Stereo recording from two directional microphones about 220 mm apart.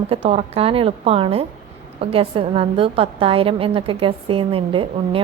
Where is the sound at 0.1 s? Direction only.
25° right (ahead or behind).